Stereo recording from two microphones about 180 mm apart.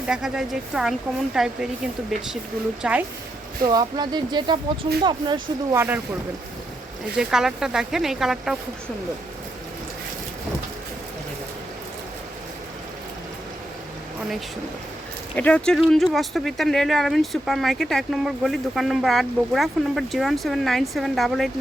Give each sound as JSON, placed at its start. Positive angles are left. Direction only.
{"t": 0.1, "sound": "speech", "side_deg": -5}
{"t": 3.6, "sound": "speech", "side_deg": -20}
{"t": 5.7, "sound": "speech", "side_deg": -10}
{"t": 7.2, "sound": "speech", "side_deg": -5}
{"t": 15.4, "sound": "speech", "side_deg": 5}